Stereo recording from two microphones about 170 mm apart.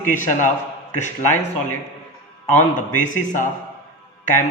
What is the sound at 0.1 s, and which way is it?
Speech, 50° left (ahead or behind).